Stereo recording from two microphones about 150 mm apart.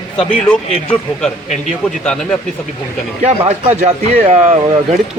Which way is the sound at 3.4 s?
50° right (ahead or behind).